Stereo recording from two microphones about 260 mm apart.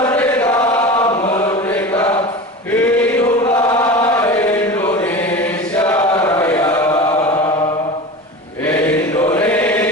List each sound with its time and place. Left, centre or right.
0.0 s chant: centre
1.1 s chant: left
1.5 s chant: centre
8.6 s chant: centre